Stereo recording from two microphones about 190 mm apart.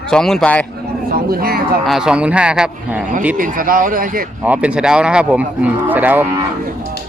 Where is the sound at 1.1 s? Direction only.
50° right (ahead or behind).